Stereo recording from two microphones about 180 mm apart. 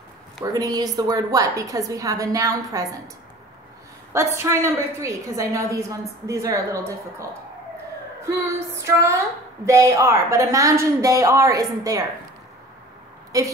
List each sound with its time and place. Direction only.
0.5 s a woman's voice: 20° right (ahead or behind)
4.1 s a woman's voice: 15° right (ahead or behind)
8.3 s a woman's voice: 15° right (ahead or behind)
13.3 s a woman's voice: 20° right (ahead or behind)